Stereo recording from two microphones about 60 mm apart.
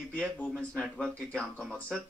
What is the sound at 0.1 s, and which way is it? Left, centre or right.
Speech, left.